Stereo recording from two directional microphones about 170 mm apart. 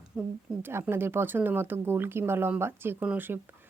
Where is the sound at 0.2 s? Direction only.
15° right (ahead or behind).